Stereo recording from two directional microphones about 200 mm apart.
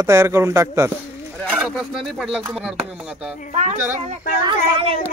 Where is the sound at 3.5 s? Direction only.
35° right (ahead or behind).